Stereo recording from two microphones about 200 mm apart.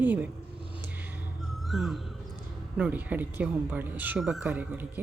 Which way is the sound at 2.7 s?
5° right (ahead or behind).